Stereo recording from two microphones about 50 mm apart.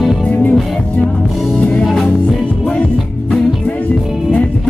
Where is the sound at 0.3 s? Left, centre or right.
Left.